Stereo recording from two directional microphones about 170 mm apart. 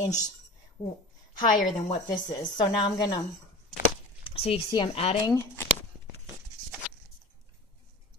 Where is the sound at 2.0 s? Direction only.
25° left (ahead or behind).